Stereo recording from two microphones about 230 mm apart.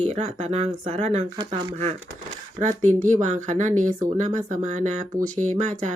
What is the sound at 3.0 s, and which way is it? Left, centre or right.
Speech, right.